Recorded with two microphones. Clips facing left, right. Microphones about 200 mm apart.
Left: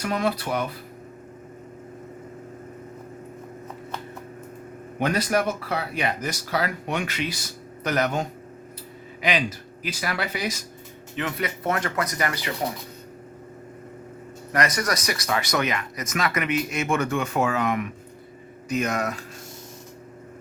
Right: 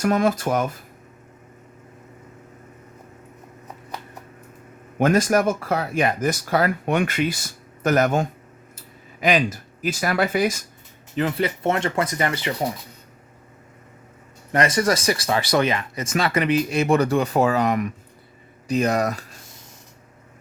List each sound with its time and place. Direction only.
0.0 s speech: 45° right (ahead or behind)
4.9 s speech: 45° right (ahead or behind)
11.1 s speech: 30° right (ahead or behind)
14.5 s speech: 25° right (ahead or behind)